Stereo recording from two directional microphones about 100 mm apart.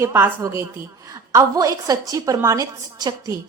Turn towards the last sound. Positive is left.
turn(degrees=-40)  # may be behind; listen again after turning